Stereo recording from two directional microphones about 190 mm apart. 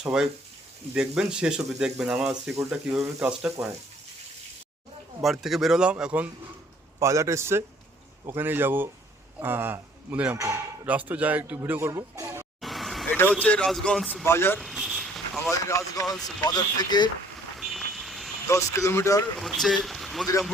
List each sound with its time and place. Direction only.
0.0 s speech: 5° right (ahead or behind)
5.2 s speech: centre (ahead or behind)
12.6 s vehicle: centre (ahead or behind)
13.3 s speech: 5° left (ahead or behind)
14.6 s a sound: centre (ahead or behind)
15.4 s speech: 15° left (ahead or behind)
17.6 s vehicle: centre (ahead or behind)
18.4 s speech: 15° left (ahead or behind)
19.4 s speech: centre (ahead or behind)